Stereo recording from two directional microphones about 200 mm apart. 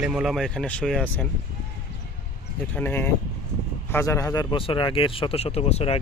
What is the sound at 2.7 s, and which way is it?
Speech, 10° left (ahead or behind).